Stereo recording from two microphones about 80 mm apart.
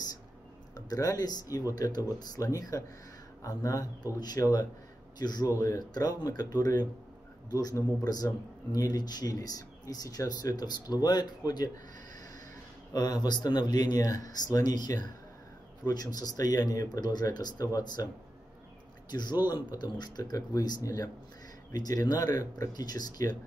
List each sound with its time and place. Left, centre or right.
0.7 s speech: left
12.9 s speech: left
19.0 s a man's voice: left